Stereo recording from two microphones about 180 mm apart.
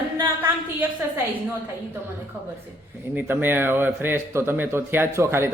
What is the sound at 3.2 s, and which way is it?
A man's voice, 10° right (ahead or behind).